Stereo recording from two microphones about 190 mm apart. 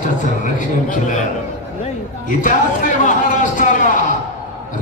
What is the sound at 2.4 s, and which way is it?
A man's voice, 40° left (ahead or behind).